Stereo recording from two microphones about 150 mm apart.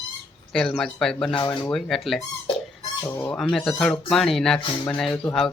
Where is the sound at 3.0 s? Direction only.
15° left (ahead or behind).